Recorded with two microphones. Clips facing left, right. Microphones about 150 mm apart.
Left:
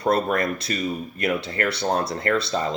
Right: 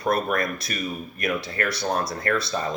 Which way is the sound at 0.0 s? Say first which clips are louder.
Left 2 dB; 30° left (ahead or behind).